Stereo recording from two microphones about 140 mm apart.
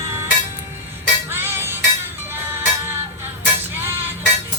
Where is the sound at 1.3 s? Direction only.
15° right (ahead or behind).